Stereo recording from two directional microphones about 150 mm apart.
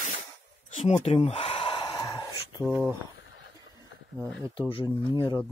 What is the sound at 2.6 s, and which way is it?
Speech, 5° right (ahead or behind).